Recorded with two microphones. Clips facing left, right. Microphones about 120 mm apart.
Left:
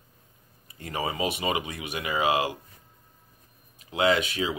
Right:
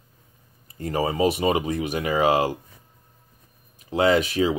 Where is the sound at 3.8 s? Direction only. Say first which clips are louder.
Right 4 dB; 40° right (ahead or behind).